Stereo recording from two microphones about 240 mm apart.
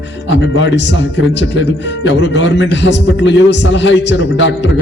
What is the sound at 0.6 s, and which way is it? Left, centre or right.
Speech, left.